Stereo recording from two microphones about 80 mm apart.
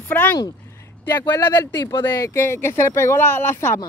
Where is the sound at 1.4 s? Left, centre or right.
Left.